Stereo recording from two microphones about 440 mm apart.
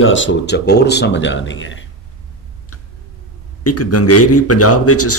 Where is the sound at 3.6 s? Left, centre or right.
Left.